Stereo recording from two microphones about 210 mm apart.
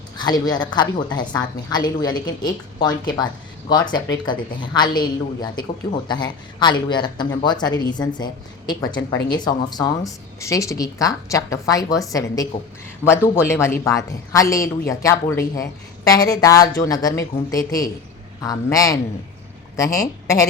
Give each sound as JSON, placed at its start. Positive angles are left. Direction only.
{"t": 0.2, "sound": "a woman's voice", "side_deg": 20}